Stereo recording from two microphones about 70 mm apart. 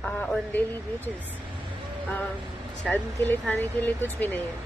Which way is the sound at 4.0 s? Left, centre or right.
Left.